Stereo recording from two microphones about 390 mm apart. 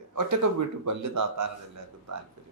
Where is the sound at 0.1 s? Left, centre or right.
Right.